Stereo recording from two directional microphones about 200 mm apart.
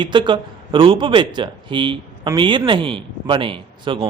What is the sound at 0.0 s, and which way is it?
A man's voice, 25° right (ahead or behind).